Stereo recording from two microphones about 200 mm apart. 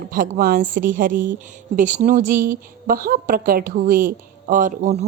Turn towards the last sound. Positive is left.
turn(degrees=-35)  # may be behind; listen again after turning